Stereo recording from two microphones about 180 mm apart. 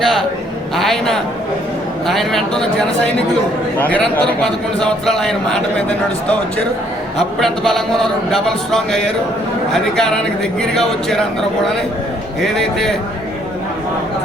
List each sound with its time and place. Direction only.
0.0 s a sound: centre (ahead or behind)
0.8 s a man's voice: centre (ahead or behind)
7.2 s speech: centre (ahead or behind)